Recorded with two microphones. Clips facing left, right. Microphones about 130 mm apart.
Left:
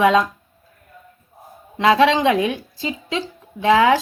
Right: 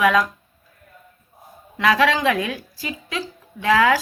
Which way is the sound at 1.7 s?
25° left (ahead or behind).